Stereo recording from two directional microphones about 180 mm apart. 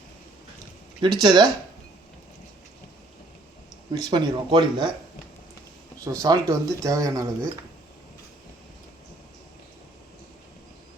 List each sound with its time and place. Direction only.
1.0 s speech: 25° right (ahead or behind)
3.9 s speech: 25° right (ahead or behind)
6.1 s speech: 20° right (ahead or behind)